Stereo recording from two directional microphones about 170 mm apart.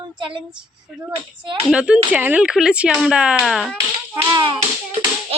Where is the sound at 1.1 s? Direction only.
35° right (ahead or behind).